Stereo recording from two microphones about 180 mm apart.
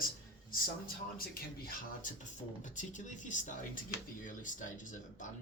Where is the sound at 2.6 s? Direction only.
45° left (ahead or behind).